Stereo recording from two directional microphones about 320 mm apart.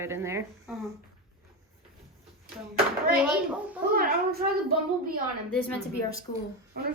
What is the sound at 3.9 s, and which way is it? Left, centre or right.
Speech, right.